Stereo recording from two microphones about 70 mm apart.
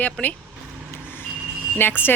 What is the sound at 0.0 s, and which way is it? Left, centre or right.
Speech, left.